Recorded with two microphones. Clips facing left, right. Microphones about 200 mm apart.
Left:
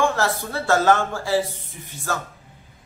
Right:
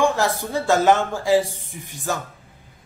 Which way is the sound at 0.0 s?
15° right (ahead or behind).